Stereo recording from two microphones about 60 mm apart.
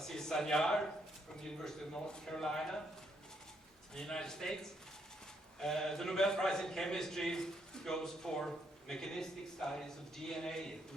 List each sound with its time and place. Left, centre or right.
0.0 s a sound: centre
1.6 s a man's voice: centre
3.9 s a man's voice: centre
5.5 s a man's voice: centre